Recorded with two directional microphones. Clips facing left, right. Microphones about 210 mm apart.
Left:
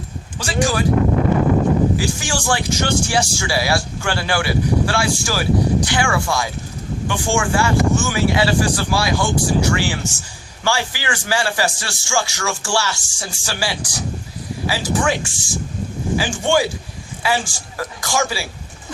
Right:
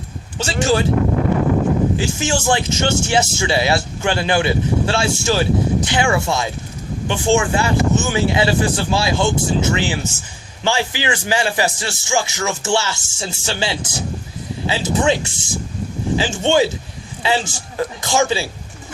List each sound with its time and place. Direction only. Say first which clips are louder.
0.3 s speech: right 2 dB; 25° right (ahead or behind)
2.0 s speech: right 2 dB; 20° right (ahead or behind)